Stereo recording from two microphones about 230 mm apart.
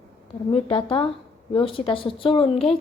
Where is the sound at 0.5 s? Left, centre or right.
Left.